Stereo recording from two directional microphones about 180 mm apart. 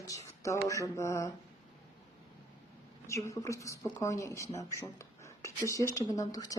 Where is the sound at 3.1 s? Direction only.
15° left (ahead or behind).